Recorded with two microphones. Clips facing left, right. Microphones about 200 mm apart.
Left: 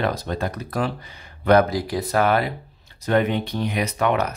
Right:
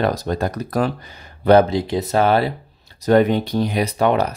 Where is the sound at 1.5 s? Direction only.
25° right (ahead or behind).